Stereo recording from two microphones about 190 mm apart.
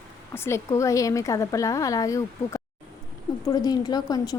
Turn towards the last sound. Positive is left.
turn(degrees=20)  # may be behind; listen again after turning